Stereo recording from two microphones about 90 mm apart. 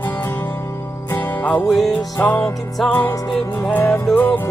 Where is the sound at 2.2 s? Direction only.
25° left (ahead or behind).